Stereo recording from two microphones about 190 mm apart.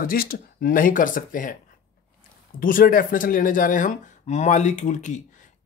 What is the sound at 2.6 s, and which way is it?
Speech, 45° left (ahead or behind).